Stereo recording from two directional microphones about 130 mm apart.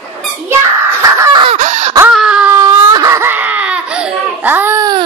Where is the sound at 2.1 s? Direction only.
5° right (ahead or behind).